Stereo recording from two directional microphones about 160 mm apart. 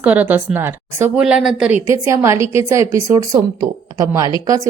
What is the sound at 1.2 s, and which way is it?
Speech, 5° right (ahead or behind).